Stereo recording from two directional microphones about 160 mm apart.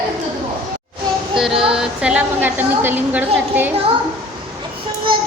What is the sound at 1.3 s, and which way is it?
A woman's voice, 5° right (ahead or behind).